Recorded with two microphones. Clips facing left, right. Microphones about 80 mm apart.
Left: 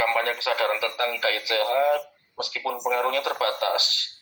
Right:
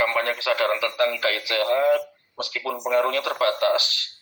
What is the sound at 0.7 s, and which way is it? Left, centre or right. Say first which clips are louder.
Speech: right 3 dB; right.